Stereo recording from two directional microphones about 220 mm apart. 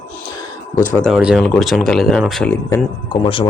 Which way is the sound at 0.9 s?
Centre (ahead or behind).